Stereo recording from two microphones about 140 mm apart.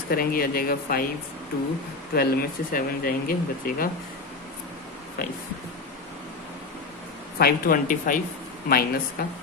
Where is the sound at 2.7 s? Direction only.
80° left.